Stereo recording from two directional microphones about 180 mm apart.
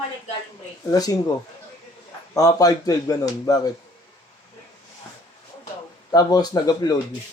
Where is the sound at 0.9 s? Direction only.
20° left (ahead or behind).